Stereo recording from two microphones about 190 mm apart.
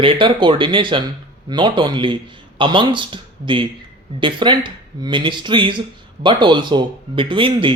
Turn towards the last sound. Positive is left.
turn(degrees=-25)  # may be behind; listen again after turning